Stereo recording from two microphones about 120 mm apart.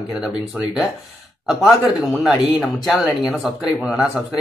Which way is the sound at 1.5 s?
5° right (ahead or behind).